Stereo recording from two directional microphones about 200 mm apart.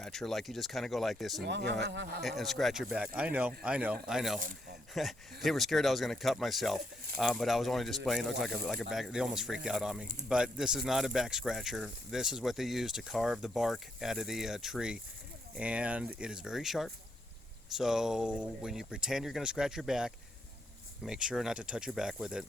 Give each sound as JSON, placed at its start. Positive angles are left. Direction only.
{"t": 0.0, "sound": "speech", "side_deg": 0}
{"t": 1.5, "sound": "speech", "side_deg": -60}
{"t": 2.2, "sound": "speech", "side_deg": 0}